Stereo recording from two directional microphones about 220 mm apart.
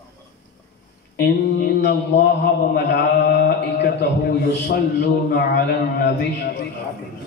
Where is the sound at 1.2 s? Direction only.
45° left (ahead or behind).